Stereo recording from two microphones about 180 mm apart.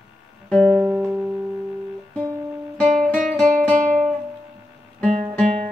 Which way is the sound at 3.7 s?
15° right (ahead or behind).